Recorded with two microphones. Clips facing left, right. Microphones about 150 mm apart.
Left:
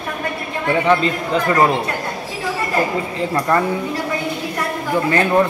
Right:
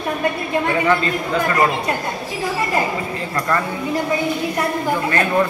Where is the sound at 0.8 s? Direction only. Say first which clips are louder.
Left 2 dB; 20° left (ahead or behind).